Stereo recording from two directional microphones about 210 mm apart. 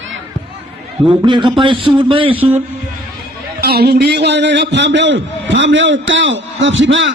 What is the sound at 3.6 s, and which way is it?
A man's voice, 50° right (ahead or behind).